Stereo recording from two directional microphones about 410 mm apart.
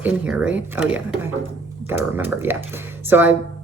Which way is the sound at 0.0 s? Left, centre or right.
Centre.